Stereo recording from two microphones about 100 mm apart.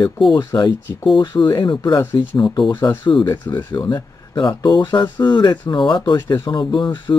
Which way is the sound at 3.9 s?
50° left (ahead or behind).